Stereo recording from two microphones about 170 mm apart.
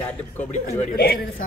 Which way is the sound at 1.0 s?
65° left (ahead or behind).